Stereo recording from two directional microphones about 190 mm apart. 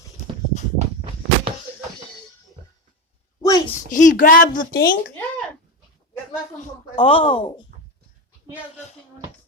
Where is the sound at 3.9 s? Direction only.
40° left (ahead or behind).